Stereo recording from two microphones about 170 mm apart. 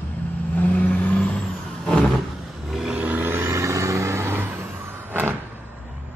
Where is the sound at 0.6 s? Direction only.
10° left (ahead or behind).